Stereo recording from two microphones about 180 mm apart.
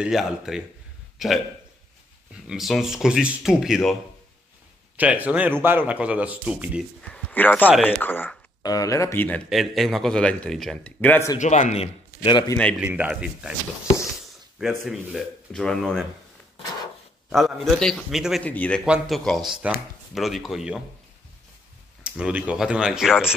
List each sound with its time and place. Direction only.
0.0 s a man's voice: centre (ahead or behind)
1.1 s a sound: centre (ahead or behind)
2.4 s a man's voice: centre (ahead or behind)
4.9 s speech: 10° right (ahead or behind)
7.0 s speech: 10° left (ahead or behind)
9.5 s a man's voice: centre (ahead or behind)
11.3 s speech: 40° left (ahead or behind); by 12.5 s 25° left (ahead or behind)
12.8 s speech: 10° right (ahead or behind)
14.6 s a man's voice: centre (ahead or behind)
17.3 s a man's voice: centre (ahead or behind)
22.0 s a man's voice: 5° right (ahead or behind)